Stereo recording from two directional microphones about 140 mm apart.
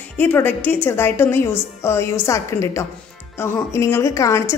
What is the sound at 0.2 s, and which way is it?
A woman's voice, 15° left (ahead or behind).